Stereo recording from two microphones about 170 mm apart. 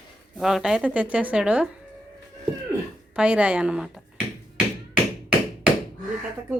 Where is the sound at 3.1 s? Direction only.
5° right (ahead or behind).